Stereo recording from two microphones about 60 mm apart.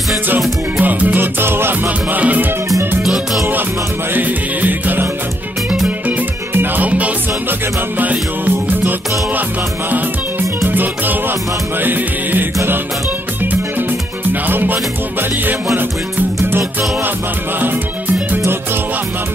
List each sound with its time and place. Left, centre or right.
0.7 s music: right
2.1 s music: right
3.0 s music: centre
4.1 s music: right
6.8 s music: right
10.7 s music: right
14.5 s music: right
16.4 s music: right